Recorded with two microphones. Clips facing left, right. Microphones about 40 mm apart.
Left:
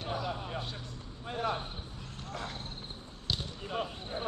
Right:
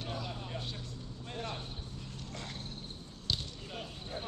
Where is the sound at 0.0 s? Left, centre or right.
Centre.